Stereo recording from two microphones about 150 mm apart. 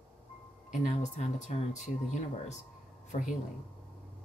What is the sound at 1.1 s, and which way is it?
Speech, 50° left (ahead or behind).